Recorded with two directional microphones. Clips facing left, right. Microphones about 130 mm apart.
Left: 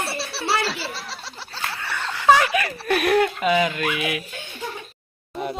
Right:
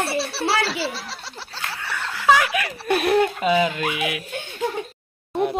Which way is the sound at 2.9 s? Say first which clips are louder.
Right 1 dB; 25° right (ahead or behind).